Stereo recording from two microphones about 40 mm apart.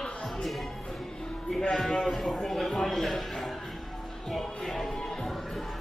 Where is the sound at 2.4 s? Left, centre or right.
Centre.